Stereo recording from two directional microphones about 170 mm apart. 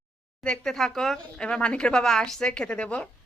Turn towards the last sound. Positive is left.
turn(degrees=5)  # may be behind; listen again after turning